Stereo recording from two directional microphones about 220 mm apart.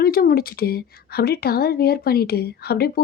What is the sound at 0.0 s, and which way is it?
Speech, 45° left (ahead or behind).